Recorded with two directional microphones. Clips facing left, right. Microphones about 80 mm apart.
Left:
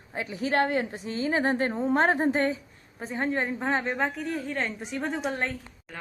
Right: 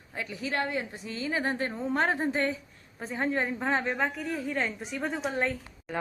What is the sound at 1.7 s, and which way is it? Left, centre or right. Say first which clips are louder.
Speech: left 3 dB; left.